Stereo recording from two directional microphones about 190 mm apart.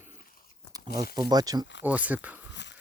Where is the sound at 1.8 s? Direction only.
10° right (ahead or behind).